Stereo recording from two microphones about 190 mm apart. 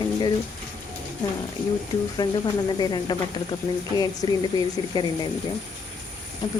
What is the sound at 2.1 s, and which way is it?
Speech, 20° left (ahead or behind).